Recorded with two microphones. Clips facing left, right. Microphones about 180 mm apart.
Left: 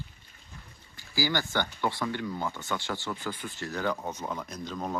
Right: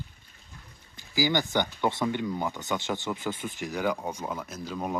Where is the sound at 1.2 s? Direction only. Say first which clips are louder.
Right 3 dB; 15° right (ahead or behind).